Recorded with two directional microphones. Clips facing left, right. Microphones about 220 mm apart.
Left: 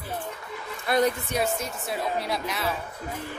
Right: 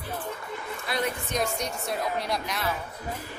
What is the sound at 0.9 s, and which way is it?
Speech, 50° left (ahead or behind).